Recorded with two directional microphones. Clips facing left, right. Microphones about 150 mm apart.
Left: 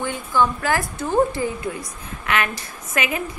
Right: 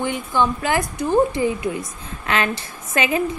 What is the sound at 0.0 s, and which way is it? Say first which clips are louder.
A woman's voice: right 1 dB; 20° right (ahead or behind).